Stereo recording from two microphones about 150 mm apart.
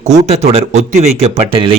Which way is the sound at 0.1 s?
45° right (ahead or behind).